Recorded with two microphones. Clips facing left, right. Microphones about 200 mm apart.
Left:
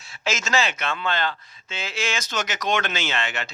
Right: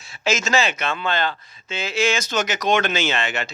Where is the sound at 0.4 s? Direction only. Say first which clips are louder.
Even; 10° right (ahead or behind).